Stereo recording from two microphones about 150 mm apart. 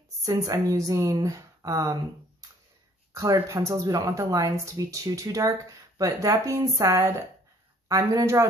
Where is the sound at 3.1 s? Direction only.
20° right (ahead or behind).